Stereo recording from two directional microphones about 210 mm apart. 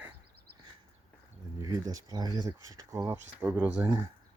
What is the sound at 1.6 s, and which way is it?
Speech, 15° right (ahead or behind).